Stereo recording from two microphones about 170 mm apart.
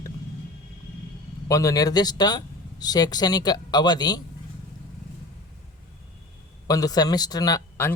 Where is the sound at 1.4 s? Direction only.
20° left (ahead or behind).